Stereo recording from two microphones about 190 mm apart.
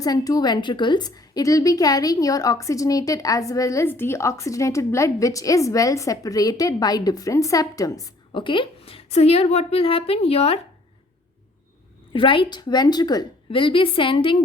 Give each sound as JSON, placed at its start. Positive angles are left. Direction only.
{"t": 0.0, "sound": "a woman's voice", "side_deg": 20}
{"t": 12.1, "sound": "a woman's voice", "side_deg": 25}